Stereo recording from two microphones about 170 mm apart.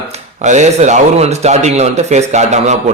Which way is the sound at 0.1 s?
45° right (ahead or behind).